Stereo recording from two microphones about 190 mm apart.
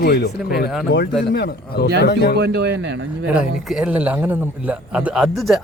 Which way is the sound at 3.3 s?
5° right (ahead or behind).